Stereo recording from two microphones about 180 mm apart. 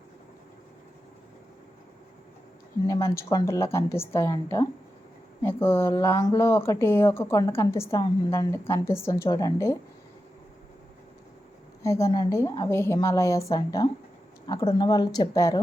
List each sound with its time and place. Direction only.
2.8 s speech: 15° left (ahead or behind)
11.8 s a woman's voice: 15° left (ahead or behind)